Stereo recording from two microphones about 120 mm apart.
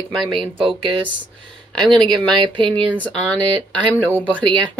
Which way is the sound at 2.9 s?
10° left (ahead or behind).